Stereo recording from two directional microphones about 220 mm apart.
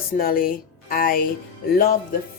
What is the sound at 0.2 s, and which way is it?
A woman's voice, 40° left (ahead or behind).